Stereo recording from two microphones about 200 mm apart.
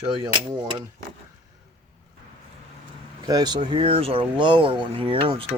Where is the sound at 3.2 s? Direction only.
20° right (ahead or behind).